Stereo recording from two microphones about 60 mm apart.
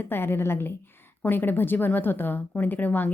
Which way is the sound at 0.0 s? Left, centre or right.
Left.